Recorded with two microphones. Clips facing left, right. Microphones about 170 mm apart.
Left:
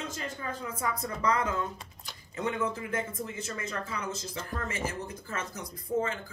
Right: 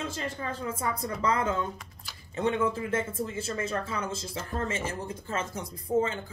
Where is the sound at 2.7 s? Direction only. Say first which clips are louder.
Right 4 dB; 25° right (ahead or behind).